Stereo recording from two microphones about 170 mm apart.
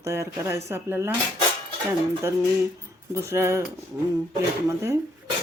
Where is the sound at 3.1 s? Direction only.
15° right (ahead or behind).